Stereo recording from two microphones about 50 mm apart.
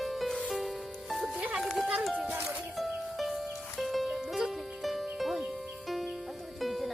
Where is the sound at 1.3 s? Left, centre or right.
Right.